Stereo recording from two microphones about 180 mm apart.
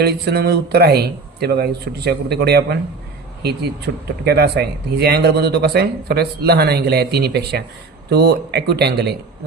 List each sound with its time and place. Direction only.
0.0 s speech: 65° right (ahead or behind)